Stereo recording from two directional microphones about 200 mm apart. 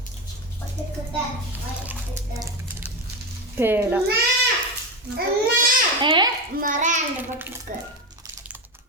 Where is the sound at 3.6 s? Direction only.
10° right (ahead or behind).